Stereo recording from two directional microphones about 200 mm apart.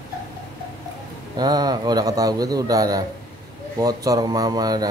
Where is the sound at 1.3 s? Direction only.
20° right (ahead or behind).